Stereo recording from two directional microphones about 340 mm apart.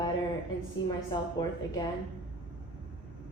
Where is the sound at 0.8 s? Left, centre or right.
Centre.